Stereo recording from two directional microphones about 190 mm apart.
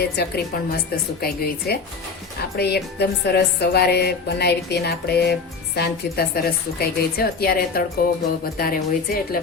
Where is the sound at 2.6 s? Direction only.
60° left (ahead or behind).